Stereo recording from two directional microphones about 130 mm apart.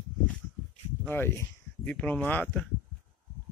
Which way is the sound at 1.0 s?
15° left (ahead or behind).